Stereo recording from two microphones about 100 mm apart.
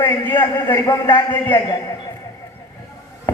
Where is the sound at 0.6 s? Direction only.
30° left (ahead or behind).